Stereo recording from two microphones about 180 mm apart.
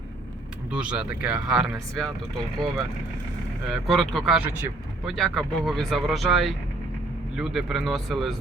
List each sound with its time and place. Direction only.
0.7 s speech: 5° right (ahead or behind)